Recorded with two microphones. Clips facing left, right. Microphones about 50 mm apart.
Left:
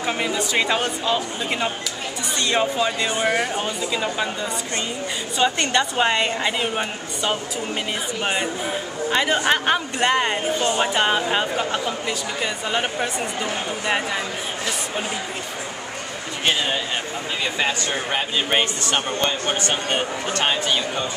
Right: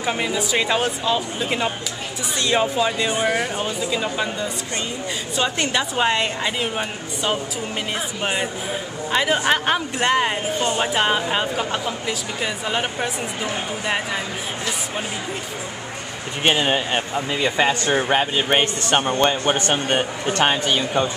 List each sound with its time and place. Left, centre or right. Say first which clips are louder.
0.0 s a woman's voice: right 1 dB; centre
16.4 s a man's voice: right 3 dB; right
17.4 s a man's voice: right 4 dB; centre; by 20.7 s right
20.7 s speech: right 3 dB; centre